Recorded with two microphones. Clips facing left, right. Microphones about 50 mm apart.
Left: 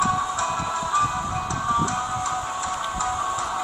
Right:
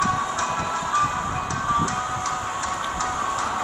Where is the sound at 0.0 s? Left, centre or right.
Centre.